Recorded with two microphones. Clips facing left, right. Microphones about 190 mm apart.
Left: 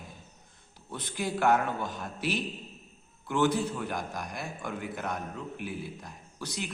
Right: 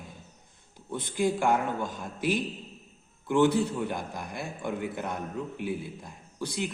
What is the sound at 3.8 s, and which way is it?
A man's voice, 25° right (ahead or behind).